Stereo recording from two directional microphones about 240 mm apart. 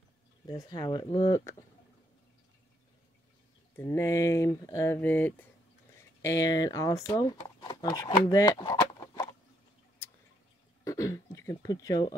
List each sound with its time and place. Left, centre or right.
0.5 s speech: centre
3.7 s speech: centre
10.8 s throat clearing: centre